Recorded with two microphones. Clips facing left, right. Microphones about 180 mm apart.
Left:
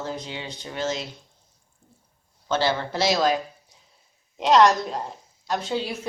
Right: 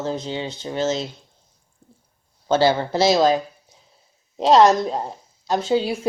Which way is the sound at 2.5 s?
35° right (ahead or behind).